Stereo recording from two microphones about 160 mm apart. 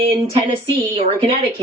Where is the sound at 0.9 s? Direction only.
40° right (ahead or behind).